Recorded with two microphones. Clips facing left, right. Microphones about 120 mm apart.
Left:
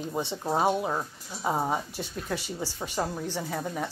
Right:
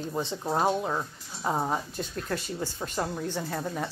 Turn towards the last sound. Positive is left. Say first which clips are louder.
# even
turn(degrees=5)  # may be behind; listen again after turning